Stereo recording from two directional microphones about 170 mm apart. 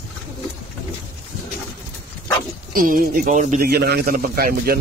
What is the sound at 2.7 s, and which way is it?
A man's voice, 55° right (ahead or behind).